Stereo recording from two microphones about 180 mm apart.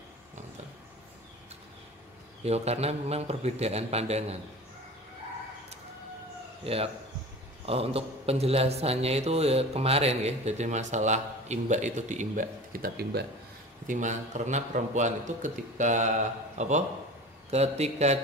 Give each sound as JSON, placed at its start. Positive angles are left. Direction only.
{"t": 2.4, "sound": "speech", "side_deg": -35}
{"t": 6.6, "sound": "speech", "side_deg": -35}
{"t": 13.8, "sound": "a man's voice", "side_deg": -45}